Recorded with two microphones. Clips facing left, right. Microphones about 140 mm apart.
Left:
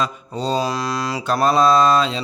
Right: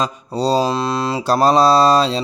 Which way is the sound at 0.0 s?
35° right (ahead or behind).